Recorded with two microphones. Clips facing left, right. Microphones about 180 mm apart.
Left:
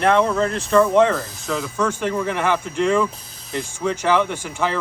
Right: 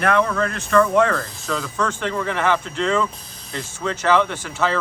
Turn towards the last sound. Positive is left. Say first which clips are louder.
# even
turn(degrees=10)  # may be behind; listen again after turning